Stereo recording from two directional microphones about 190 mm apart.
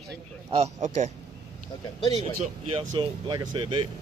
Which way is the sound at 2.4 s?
25° right (ahead or behind).